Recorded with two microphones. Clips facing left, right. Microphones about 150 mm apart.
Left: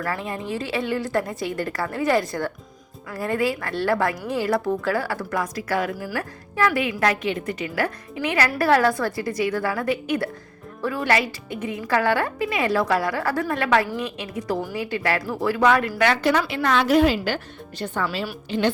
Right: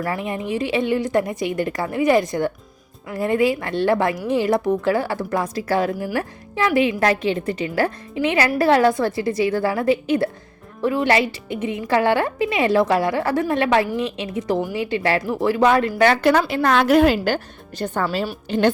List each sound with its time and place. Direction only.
0.0 s speech: 15° right (ahead or behind); by 16.1 s 30° right (ahead or behind)
16.5 s a woman's voice: 45° right (ahead or behind)